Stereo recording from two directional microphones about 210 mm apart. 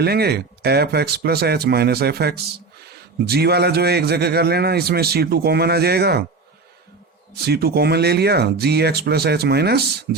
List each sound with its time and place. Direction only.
0.0 s a man's voice: 50° right (ahead or behind)
7.4 s a man's voice: 50° right (ahead or behind)